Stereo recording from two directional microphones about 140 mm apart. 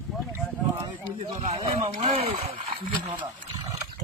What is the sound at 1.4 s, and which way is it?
Speech, 45° right (ahead or behind).